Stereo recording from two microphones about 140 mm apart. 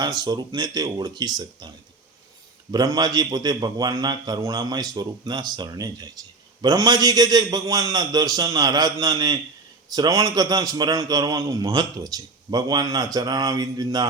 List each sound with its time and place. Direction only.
0.2 s a man's voice: 30° right (ahead or behind)
2.7 s a man's voice: 25° right (ahead or behind)